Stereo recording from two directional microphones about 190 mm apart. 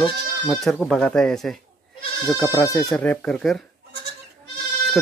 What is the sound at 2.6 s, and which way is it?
Speech, 20° left (ahead or behind).